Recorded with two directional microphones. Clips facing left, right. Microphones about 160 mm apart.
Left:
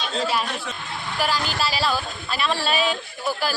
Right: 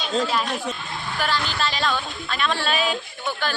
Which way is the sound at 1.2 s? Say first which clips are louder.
Left 1 dB; 10° left (ahead or behind).